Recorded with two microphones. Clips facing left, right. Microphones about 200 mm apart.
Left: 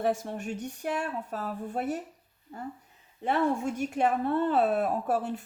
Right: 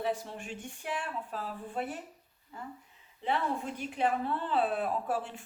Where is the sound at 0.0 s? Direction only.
45° left (ahead or behind).